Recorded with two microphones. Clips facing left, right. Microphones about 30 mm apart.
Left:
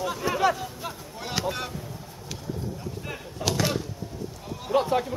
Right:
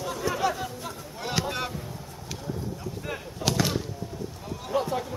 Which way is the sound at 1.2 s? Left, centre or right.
Centre.